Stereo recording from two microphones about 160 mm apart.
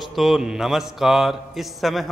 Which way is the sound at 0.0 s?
Centre (ahead or behind).